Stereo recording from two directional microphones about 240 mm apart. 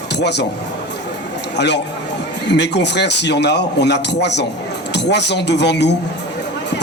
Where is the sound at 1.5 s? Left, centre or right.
Left.